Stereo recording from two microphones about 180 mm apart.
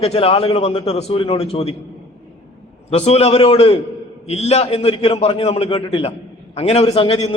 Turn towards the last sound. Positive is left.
turn(degrees=30)  # may be behind; listen again after turning